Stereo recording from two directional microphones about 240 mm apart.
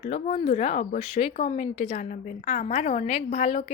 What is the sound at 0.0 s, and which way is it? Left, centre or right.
Speech, left.